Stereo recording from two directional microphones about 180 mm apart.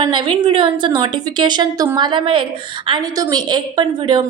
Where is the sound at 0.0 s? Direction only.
25° right (ahead or behind).